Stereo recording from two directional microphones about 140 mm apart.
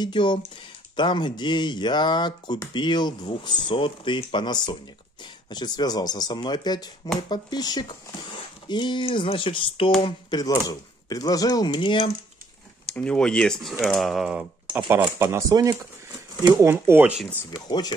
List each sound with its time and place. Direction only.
0.0 s speech: 35° left (ahead or behind)
10.4 s speech: 25° left (ahead or behind)
12.9 s speech: 10° left (ahead or behind); by 17.1 s 15° right (ahead or behind)
17.5 s speech: 30° left (ahead or behind)